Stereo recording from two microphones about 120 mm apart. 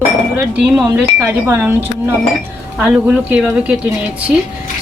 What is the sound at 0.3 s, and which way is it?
Speech, 10° right (ahead or behind).